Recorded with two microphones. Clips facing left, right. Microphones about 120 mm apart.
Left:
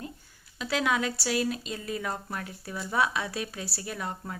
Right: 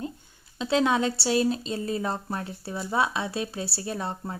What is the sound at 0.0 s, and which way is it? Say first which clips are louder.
A woman's voice: right 6 dB; 25° right (ahead or behind).